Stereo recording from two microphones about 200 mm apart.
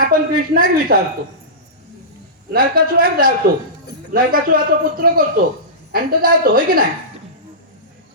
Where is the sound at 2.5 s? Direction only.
45° right (ahead or behind).